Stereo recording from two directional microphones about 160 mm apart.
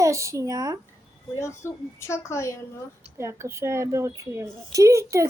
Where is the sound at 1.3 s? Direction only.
15° left (ahead or behind).